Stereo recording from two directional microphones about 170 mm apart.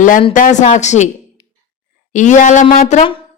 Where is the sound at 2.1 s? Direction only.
45° left (ahead or behind).